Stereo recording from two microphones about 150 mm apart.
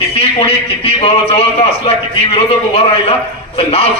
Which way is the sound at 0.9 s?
40° left (ahead or behind).